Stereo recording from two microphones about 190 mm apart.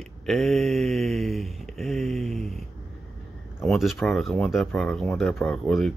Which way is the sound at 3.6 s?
Centre (ahead or behind).